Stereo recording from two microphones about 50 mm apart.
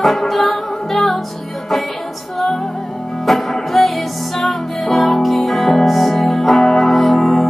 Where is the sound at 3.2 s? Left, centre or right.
Centre.